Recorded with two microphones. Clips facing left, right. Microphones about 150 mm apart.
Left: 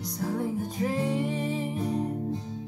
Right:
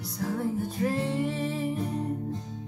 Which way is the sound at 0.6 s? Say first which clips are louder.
Even; 15° left (ahead or behind).